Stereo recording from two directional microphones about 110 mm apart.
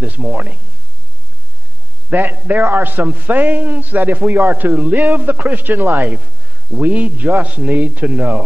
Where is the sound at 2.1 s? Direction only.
15° right (ahead or behind).